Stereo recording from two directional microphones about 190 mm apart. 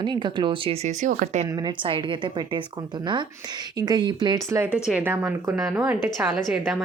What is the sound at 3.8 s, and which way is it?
Speech, 20° right (ahead or behind).